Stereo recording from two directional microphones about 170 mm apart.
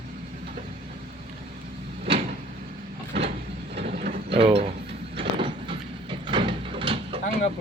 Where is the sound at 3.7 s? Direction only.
40° right (ahead or behind).